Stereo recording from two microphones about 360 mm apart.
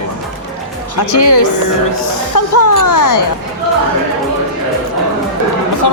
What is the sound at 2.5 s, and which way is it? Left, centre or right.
Speech, left.